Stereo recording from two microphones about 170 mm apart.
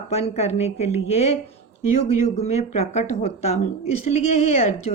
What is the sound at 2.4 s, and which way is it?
Speech, 40° left (ahead or behind).